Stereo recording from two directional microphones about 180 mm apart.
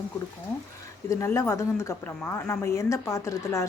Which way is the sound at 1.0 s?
15° left (ahead or behind).